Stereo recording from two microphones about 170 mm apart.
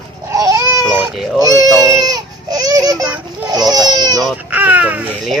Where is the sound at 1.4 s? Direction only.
20° right (ahead or behind).